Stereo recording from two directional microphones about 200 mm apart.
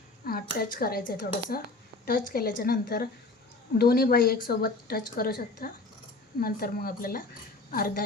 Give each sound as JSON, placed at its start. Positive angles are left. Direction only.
{"t": 0.3, "sound": "a woman's voice", "side_deg": 50}